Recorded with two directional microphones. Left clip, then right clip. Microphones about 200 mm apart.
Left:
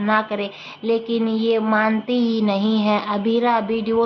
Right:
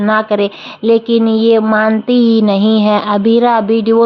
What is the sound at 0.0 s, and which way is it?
Speech, 55° right (ahead or behind).